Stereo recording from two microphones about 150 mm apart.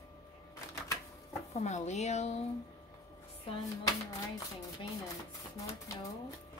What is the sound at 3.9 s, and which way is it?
Speech, 20° left (ahead or behind).